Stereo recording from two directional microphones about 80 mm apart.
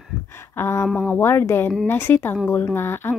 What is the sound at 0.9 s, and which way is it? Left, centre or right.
Speech, centre.